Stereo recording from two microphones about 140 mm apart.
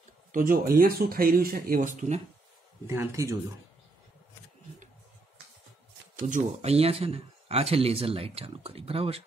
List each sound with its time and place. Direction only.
0.3 s speech: 80° right; by 2.2 s 60° right (ahead or behind)
2.9 s speech: 20° right (ahead or behind)
6.1 s speech: 65° right (ahead or behind); by 9.2 s 45° right (ahead or behind)